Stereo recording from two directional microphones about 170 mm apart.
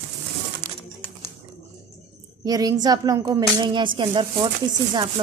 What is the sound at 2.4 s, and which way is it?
A woman's voice, 20° right (ahead or behind).